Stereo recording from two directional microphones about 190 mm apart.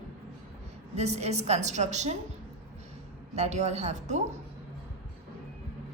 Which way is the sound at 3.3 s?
35° right (ahead or behind).